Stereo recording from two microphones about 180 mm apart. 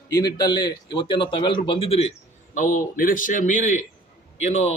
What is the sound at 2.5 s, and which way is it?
A man's voice, 45° left (ahead or behind).